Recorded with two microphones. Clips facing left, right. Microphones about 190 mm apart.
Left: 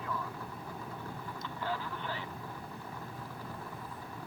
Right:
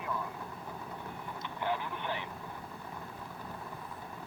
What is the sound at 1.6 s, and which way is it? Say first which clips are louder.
Vehicle: right 3 dB; 20° right (ahead or behind).